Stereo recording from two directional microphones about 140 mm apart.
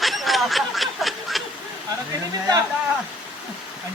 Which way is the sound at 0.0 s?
Centre (ahead or behind).